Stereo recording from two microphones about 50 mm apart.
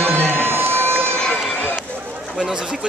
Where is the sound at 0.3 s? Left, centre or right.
Right.